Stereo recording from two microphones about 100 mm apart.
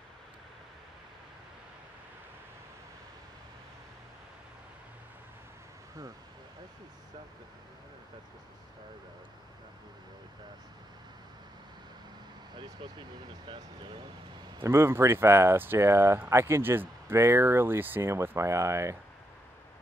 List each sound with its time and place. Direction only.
13.5 s speech: 55° right (ahead or behind)
14.6 s speech: 25° right (ahead or behind)